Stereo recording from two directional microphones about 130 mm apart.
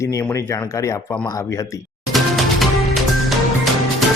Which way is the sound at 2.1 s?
Centre (ahead or behind).